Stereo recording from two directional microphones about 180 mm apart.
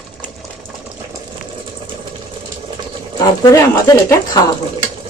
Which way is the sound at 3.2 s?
20° left (ahead or behind).